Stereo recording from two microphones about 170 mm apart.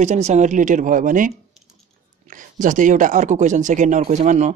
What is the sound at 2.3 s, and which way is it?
Speech, 50° right (ahead or behind).